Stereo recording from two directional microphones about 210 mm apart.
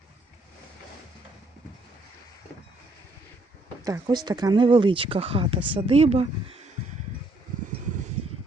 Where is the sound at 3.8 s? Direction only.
15° right (ahead or behind).